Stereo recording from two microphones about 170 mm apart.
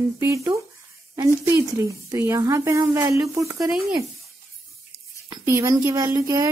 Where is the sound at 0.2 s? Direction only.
15° right (ahead or behind).